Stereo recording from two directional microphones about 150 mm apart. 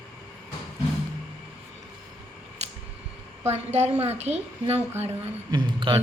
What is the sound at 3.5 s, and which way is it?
A woman's voice, 45° right (ahead or behind).